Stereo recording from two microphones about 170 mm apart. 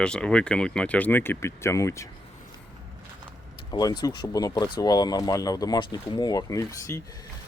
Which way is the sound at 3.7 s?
25° left (ahead or behind).